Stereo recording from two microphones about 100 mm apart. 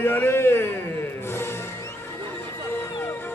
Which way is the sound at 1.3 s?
25° left (ahead or behind).